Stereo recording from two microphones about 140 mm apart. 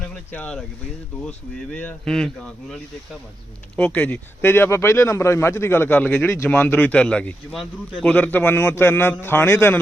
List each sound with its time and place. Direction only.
0.1 s speech: 10° left (ahead or behind)